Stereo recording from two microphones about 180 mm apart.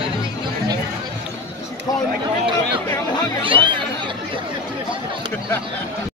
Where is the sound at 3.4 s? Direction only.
30° right (ahead or behind).